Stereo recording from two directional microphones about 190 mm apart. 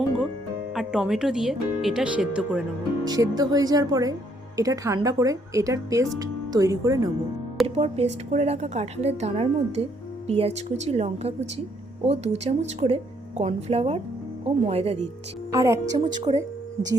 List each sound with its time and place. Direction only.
0.7 s speech: 5° right (ahead or behind)
3.0 s speech: 20° right (ahead or behind)
7.8 s a woman's voice: 35° right (ahead or behind)
15.5 s speech: 15° right (ahead or behind)